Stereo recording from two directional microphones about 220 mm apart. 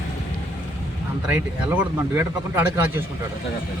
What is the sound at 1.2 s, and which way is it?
Speech, 5° right (ahead or behind).